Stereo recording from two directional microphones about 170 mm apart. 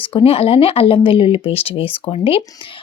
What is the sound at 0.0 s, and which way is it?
A woman's voice, 35° left (ahead or behind).